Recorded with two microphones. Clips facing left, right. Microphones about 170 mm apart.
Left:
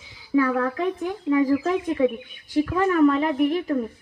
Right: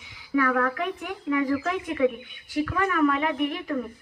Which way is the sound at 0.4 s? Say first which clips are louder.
Left 3 dB; 25° left (ahead or behind).